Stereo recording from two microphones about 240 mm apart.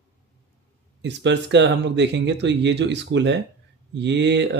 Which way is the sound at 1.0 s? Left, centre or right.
Right.